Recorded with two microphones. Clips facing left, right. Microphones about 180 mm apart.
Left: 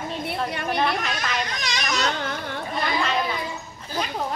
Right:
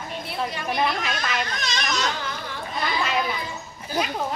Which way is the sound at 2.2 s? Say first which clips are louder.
Left 3 dB; 55° left (ahead or behind).